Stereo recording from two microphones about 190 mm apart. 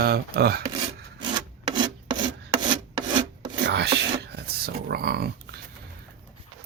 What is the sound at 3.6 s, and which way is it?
Wail, 60° right (ahead or behind).